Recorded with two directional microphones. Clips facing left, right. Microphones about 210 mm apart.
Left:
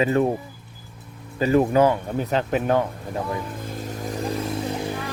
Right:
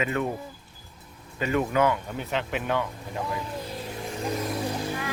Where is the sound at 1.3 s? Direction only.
35° left (ahead or behind).